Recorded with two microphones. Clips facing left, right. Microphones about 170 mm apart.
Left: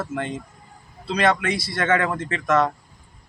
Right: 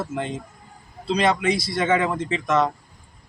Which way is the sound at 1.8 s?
10° right (ahead or behind).